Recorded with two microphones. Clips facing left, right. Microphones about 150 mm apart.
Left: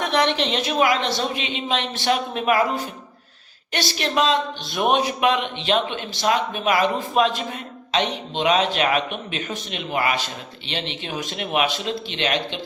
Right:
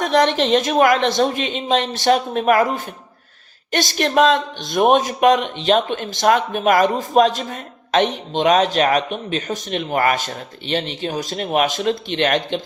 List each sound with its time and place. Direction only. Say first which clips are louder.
0.0 s speech: right 4 dB; 45° right (ahead or behind)